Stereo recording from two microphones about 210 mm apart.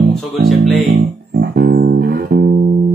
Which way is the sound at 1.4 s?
45° right (ahead or behind).